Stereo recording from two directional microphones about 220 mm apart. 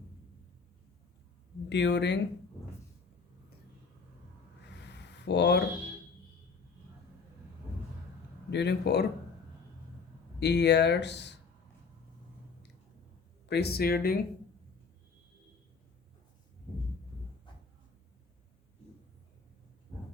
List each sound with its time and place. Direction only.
1.7 s speech: 50° left (ahead or behind)
4.7 s a sound: 50° left (ahead or behind)
8.4 s speech: 50° left (ahead or behind)
10.4 s speech: 50° left (ahead or behind)
13.5 s speech: 45° left (ahead or behind)